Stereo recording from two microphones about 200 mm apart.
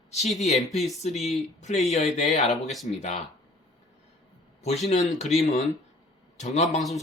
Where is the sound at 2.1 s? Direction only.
40° left (ahead or behind).